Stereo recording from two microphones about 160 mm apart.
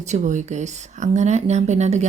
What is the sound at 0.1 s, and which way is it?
A woman's voice, 50° right (ahead or behind).